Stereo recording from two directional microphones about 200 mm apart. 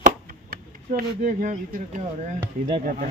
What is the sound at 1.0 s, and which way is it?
Speech, 45° right (ahead or behind).